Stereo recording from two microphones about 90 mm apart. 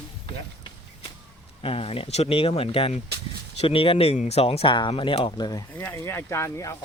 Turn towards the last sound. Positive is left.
turn(degrees=30)  # may be behind; listen again after turning